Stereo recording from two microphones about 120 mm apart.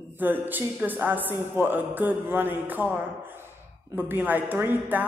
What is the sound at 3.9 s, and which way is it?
Speech, 15° right (ahead or behind).